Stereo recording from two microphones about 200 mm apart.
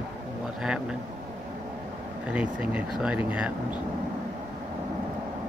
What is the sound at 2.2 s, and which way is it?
Speech, 5° right (ahead or behind).